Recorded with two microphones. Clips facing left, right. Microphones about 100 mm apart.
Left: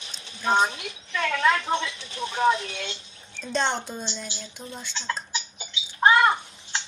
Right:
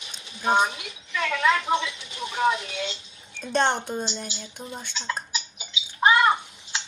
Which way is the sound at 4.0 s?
70° right (ahead or behind).